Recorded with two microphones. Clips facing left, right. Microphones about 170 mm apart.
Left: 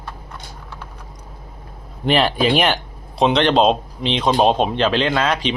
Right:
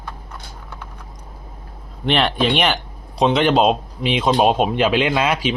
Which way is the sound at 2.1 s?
5° left (ahead or behind).